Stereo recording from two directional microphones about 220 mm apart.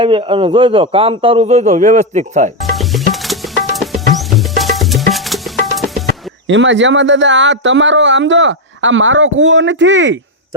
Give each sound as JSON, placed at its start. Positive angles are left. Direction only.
{"t": 0.0, "sound": "a man's voice", "side_deg": -25}
{"t": 2.6, "sound": "music", "side_deg": 0}
{"t": 6.5, "sound": "speech", "side_deg": -55}